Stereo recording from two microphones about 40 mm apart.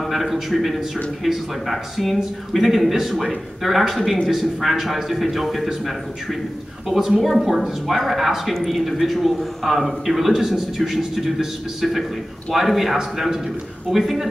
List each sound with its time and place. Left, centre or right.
0.0 s a man's voice: centre